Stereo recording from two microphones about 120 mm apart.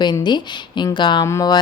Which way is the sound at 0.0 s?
40° left (ahead or behind).